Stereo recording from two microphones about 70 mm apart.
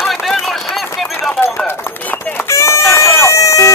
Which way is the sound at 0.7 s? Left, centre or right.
Centre.